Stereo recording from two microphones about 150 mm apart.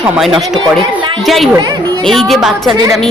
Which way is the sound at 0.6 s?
35° right (ahead or behind).